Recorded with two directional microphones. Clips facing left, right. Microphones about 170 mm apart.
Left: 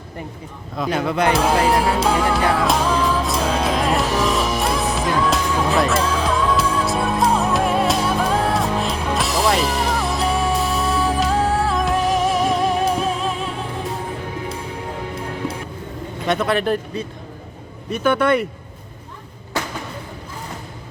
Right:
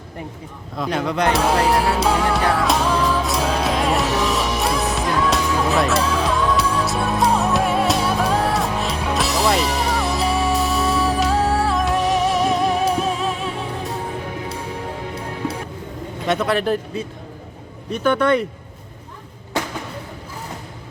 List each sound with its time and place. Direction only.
0.8 s music: 5° left (ahead or behind)
16.2 s speech: centre (ahead or behind)